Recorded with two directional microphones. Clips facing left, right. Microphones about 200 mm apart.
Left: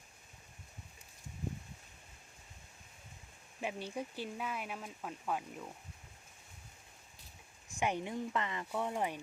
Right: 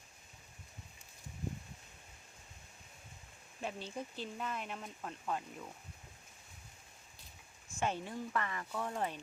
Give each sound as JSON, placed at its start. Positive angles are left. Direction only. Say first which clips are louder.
{"t": 3.6, "sound": "speech", "louder": "left 2 dB", "side_deg": 15}
{"t": 7.8, "sound": "speech", "louder": "left 2 dB", "side_deg": 15}